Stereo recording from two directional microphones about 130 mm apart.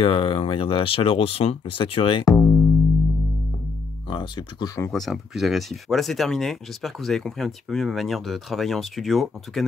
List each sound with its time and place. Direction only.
0.0 s speech: 45° left (ahead or behind)
2.2 s music: 20° left (ahead or behind)
4.1 s speech: 35° left (ahead or behind)
4.9 s speech: centre (ahead or behind)